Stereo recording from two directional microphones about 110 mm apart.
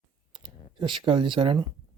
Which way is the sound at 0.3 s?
50° right (ahead or behind).